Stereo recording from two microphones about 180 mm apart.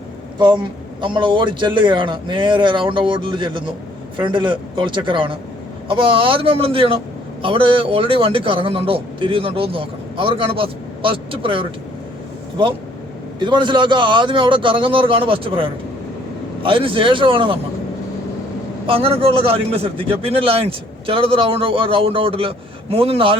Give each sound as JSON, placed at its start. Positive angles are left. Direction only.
{"t": 0.3, "sound": "a man's voice", "side_deg": -25}
{"t": 13.4, "sound": "a man's voice", "side_deg": -25}
{"t": 18.9, "sound": "a man's voice", "side_deg": -30}